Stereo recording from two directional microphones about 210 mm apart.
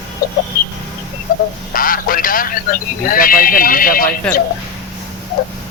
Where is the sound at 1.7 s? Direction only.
40° left (ahead or behind).